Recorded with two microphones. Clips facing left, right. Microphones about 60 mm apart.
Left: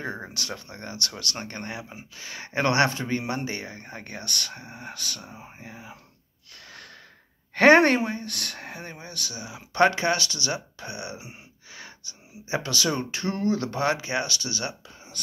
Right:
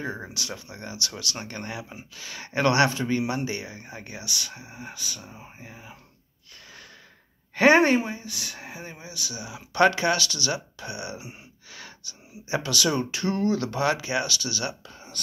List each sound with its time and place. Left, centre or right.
0.3 s a woman's voice: left
7.5 s a woman's voice: left
9.3 s speech: left